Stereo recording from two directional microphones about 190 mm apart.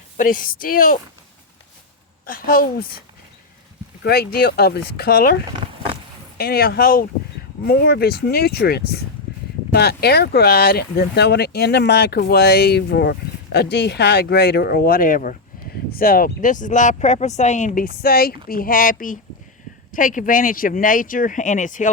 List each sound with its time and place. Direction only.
0.2 s speech: 45° left (ahead or behind)
2.2 s speech: 50° left (ahead or behind)
4.0 s speech: 55° left (ahead or behind)